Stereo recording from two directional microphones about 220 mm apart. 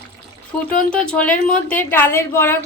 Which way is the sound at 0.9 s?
5° left (ahead or behind).